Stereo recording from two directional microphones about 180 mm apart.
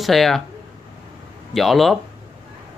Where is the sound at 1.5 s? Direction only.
Centre (ahead or behind).